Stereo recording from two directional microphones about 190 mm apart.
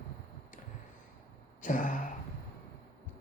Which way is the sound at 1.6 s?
45° left (ahead or behind).